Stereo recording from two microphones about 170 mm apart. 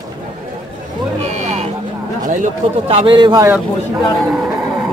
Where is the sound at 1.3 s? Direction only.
40° right (ahead or behind).